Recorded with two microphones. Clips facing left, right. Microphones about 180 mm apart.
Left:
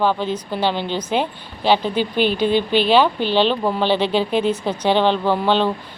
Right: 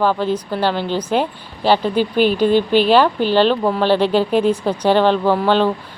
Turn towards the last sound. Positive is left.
turn(degrees=-5)  # may be behind; listen again after turning